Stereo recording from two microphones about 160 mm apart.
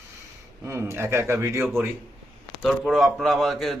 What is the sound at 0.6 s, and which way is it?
Speech, 15° right (ahead or behind).